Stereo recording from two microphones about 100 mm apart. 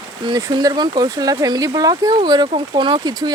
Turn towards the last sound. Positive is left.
turn(degrees=-55)  # may be behind; listen again after turning